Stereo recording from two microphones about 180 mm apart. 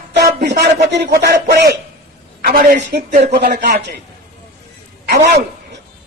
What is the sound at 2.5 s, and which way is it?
Speech, 50° right (ahead or behind).